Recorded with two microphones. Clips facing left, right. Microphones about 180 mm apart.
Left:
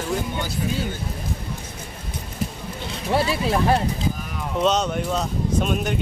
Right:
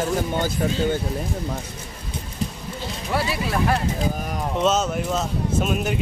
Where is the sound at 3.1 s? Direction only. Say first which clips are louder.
Left 4 dB; 25° left (ahead or behind).